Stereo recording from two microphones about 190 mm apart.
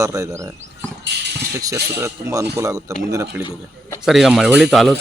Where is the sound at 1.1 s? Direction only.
65° right (ahead or behind).